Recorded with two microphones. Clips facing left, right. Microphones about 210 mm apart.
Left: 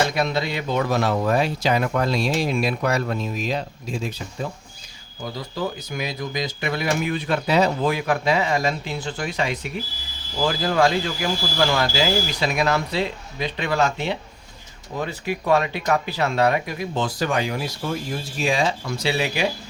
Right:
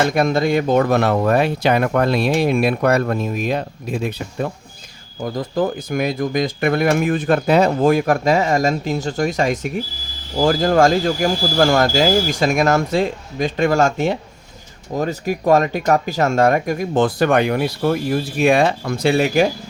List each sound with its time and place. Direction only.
0.1 s speech: 50° right (ahead or behind)
5.2 s speech: 50° right (ahead or behind)